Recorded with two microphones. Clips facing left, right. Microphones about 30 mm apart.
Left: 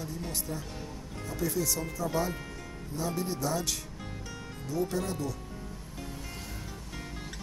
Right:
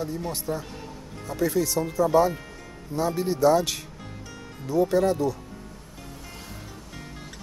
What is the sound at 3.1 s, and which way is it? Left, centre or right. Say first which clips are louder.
Speech: right 14 dB; right.